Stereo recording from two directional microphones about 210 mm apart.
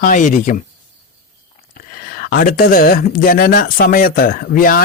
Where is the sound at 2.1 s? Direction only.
45° left (ahead or behind).